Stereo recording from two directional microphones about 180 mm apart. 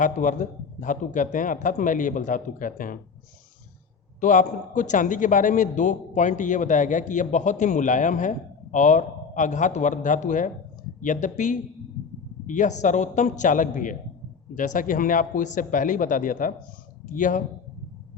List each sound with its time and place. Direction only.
0.0 s a man's voice: 45° left (ahead or behind)
4.2 s a man's voice: 45° left (ahead or behind)